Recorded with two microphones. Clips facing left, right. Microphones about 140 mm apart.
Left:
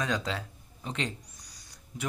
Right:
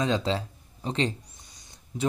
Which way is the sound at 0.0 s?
25° right (ahead or behind).